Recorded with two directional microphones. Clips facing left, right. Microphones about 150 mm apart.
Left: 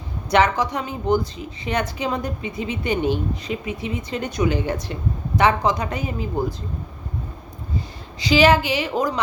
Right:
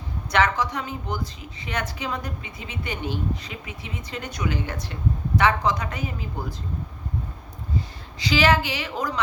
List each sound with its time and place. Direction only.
0.3 s a woman's voice: 15° left (ahead or behind)
8.3 s a woman's voice: 15° left (ahead or behind)